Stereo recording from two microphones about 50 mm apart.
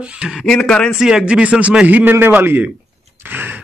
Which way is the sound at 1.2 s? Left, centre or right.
Right.